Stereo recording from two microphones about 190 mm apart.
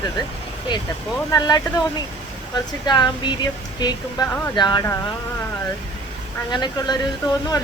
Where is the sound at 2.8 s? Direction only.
25° left (ahead or behind).